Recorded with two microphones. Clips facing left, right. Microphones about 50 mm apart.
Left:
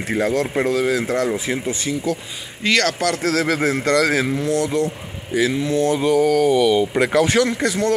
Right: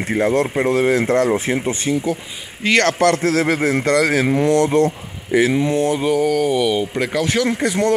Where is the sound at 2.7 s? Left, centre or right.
Right.